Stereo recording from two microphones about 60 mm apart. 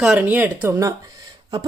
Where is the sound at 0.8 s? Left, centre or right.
Right.